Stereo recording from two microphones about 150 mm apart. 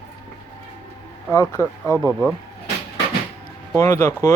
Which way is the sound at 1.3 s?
20° left (ahead or behind).